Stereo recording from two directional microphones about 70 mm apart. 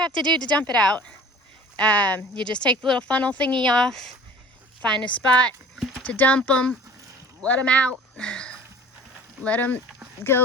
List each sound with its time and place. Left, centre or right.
0.4 s speech: centre
10.2 s speech: left